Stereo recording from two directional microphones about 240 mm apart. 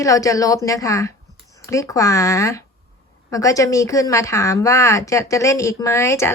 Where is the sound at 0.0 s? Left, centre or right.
Centre.